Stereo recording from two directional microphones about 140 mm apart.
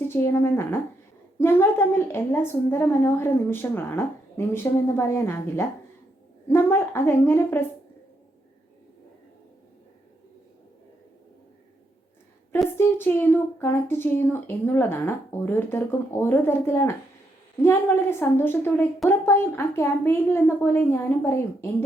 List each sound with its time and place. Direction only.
0.1 s a woman's voice: 15° left (ahead or behind)
12.7 s a woman's voice: 15° left (ahead or behind)